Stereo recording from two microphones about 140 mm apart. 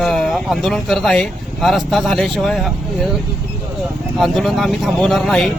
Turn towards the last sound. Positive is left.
turn(degrees=5)  # may be behind; listen again after turning